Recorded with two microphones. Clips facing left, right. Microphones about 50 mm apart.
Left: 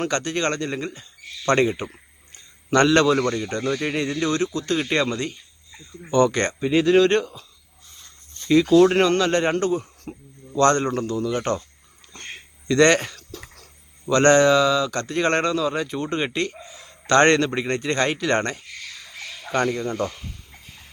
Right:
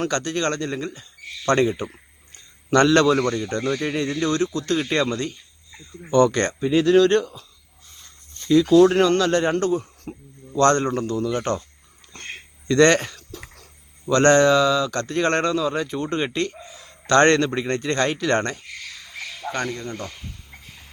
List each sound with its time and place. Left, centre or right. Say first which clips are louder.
0.1 s speech: even; left
3.1 s speech: right 1 dB; centre; by 7.3 s left
7.9 s a sound: even; centre
8.8 s speech: right 1 dB; centre
9.3 s speech: right 1 dB; left
10.0 s a sound: right 1 dB; centre
10.6 s speech: even; centre
12.6 s speech: right 1 dB; centre
13.1 s a sound: even; centre
14.1 s speech: even; centre
16.7 s a sound: even; centre
17.1 s speech: even; centre
19.6 s speech: left 6 dB; centre